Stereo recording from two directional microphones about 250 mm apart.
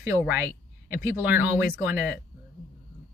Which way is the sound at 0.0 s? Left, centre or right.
Centre.